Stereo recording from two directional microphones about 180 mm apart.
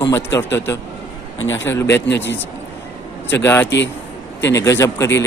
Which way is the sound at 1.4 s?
90° left.